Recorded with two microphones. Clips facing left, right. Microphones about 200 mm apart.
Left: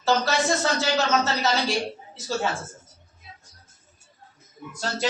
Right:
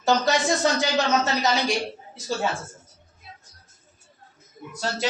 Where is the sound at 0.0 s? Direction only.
15° right (ahead or behind).